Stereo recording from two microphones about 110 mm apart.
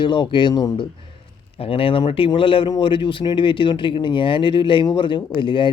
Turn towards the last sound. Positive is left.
turn(degrees=45)  # may be behind; listen again after turning